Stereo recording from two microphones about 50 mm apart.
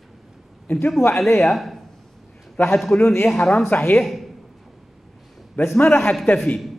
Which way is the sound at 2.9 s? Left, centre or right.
Left.